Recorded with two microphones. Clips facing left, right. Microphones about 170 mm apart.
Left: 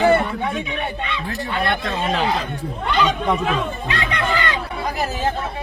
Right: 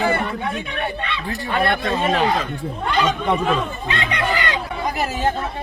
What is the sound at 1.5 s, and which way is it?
Speech, 50° right (ahead or behind).